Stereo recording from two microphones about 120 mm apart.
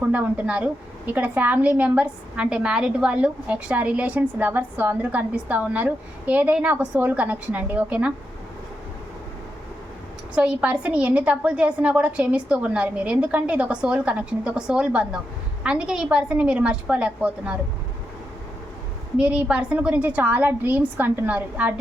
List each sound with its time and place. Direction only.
0.0 s a woman's voice: 10° right (ahead or behind)
10.3 s a woman's voice: 10° right (ahead or behind)
19.1 s a woman's voice: 10° right (ahead or behind)